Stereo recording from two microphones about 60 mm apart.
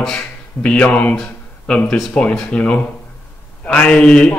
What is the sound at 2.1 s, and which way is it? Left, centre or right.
Speech, centre.